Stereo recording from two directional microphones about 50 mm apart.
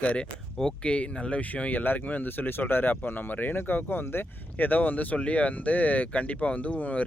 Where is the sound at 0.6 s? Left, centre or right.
Left.